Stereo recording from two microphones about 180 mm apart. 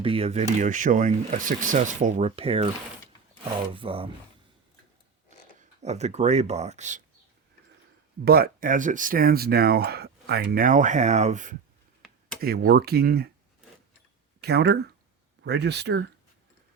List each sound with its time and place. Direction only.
0.0 s speech: 30° right (ahead or behind)
0.6 s speech: 45° right (ahead or behind); by 4.1 s 30° right (ahead or behind)
5.5 s speech: 40° right (ahead or behind)
8.2 s speech: 55° right (ahead or behind); by 11.5 s 40° right (ahead or behind)
12.4 s speech: 60° right (ahead or behind)
14.4 s speech: 60° right (ahead or behind)